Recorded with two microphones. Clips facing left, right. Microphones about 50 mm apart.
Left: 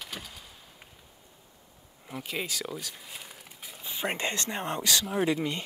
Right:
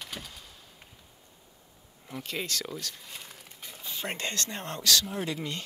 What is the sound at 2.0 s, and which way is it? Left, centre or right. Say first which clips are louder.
Speech: left 1 dB; centre.